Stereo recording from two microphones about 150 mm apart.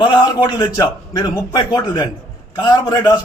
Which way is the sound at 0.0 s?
30° left (ahead or behind).